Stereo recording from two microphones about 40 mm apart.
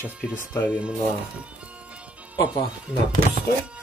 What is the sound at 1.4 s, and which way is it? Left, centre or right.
Music, right.